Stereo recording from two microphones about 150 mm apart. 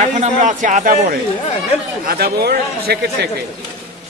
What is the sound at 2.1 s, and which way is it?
Speech, 90° right.